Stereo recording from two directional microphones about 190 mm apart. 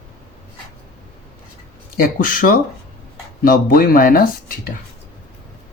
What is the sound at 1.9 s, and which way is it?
Speech, 50° left (ahead or behind).